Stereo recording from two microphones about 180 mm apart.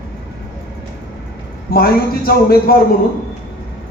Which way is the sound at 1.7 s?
55° left (ahead or behind).